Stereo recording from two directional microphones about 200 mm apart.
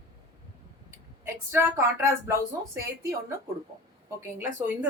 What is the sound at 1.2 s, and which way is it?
Speech, 10° right (ahead or behind).